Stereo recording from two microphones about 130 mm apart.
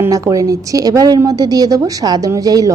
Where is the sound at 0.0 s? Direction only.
25° right (ahead or behind).